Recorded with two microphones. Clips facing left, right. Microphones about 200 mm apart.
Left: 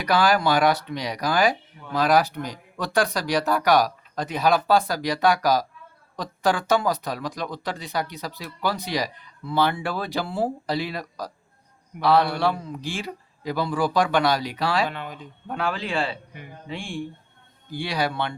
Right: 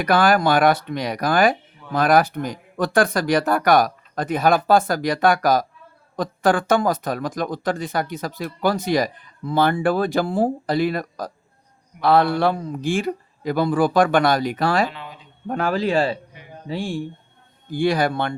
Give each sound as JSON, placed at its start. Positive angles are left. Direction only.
{"t": 0.0, "sound": "speech", "side_deg": -50}
{"t": 14.8, "sound": "speech", "side_deg": 50}
{"t": 15.4, "sound": "speech", "side_deg": -45}
{"t": 17.7, "sound": "speech", "side_deg": -50}